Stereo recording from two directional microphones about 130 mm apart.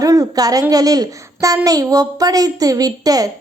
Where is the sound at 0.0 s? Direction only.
25° right (ahead or behind).